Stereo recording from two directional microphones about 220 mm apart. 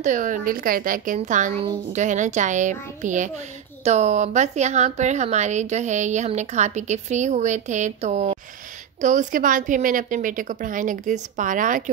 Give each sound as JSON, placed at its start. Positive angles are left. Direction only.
{"t": 0.0, "sound": "a child's voice", "side_deg": -35}